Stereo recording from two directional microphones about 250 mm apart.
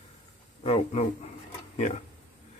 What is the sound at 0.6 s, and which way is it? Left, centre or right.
Speech, left.